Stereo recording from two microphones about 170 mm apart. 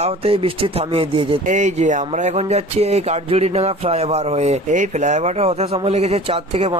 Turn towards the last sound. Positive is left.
turn(degrees=-40)  # may be behind; listen again after turning